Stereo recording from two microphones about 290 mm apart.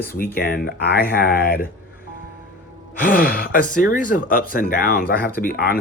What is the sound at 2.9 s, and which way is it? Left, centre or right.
Speech, left.